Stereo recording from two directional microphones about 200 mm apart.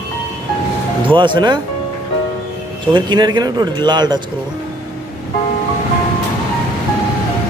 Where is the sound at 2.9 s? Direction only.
20° right (ahead or behind).